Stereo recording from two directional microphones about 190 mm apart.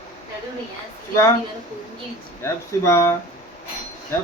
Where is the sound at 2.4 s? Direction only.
15° left (ahead or behind).